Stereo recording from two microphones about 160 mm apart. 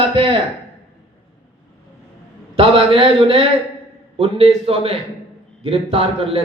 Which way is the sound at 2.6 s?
35° right (ahead or behind).